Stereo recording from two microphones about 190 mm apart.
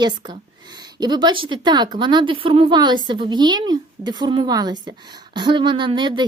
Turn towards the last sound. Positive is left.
turn(degrees=-25)  # may be behind; listen again after turning